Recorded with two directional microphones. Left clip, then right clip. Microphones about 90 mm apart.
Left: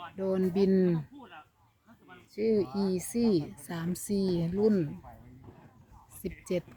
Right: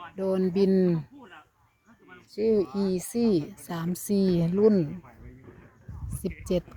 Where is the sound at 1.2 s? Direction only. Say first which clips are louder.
Right 1 dB; 25° left (ahead or behind).